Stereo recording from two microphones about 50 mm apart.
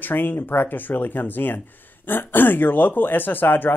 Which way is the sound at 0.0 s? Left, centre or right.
Left.